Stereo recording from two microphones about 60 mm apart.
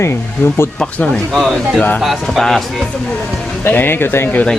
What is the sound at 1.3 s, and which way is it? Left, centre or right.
Speech, centre.